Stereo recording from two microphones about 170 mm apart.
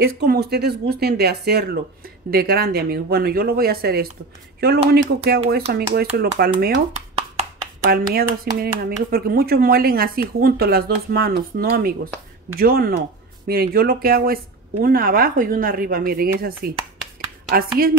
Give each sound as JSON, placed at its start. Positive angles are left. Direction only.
{"t": 0.0, "sound": "speech", "side_deg": -70}
{"t": 7.8, "sound": "speech", "side_deg": -65}